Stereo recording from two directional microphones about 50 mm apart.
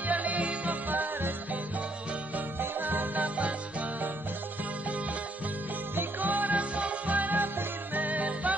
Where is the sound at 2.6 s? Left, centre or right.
Right.